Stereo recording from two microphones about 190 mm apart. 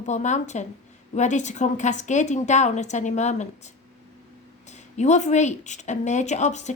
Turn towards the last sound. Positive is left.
turn(degrees=40)  # may be behind; listen again after turning